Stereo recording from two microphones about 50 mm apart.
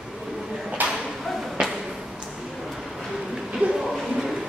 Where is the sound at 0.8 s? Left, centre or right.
Right.